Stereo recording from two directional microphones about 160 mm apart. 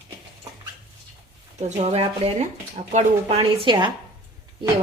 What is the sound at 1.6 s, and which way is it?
Speech, 40° right (ahead or behind).